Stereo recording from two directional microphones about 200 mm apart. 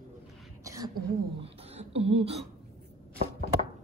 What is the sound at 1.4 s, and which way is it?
Beatboxing, 30° right (ahead or behind).